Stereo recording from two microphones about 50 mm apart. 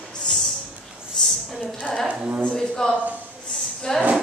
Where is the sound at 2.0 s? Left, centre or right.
Right.